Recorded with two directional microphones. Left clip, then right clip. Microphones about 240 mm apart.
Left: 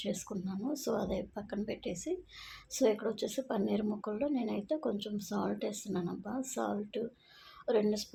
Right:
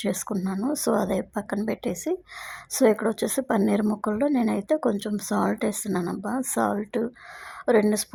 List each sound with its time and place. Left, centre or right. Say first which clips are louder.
0.0 s a woman's voice: right 10 dB; right